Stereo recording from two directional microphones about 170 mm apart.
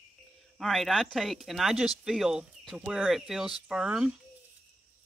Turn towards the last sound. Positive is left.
turn(degrees=-5)  # may be behind; listen again after turning